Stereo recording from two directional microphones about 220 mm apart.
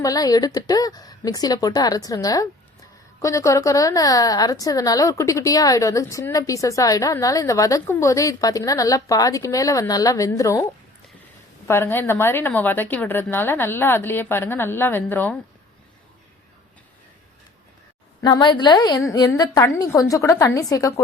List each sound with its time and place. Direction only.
0.0 s a woman's voice: 15° left (ahead or behind)
11.7 s a woman's voice: 10° left (ahead or behind)
18.2 s a woman's voice: 20° left (ahead or behind)